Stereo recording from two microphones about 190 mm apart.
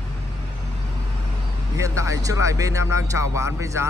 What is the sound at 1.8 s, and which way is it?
Speech, 15° right (ahead or behind).